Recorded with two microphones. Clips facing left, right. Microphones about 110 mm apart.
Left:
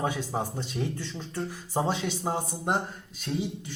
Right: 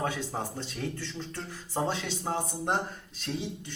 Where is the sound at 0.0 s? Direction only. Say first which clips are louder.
Left 3 dB; 15° left (ahead or behind).